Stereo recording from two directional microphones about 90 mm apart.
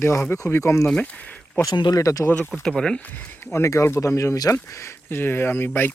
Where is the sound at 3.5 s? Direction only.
30° left (ahead or behind).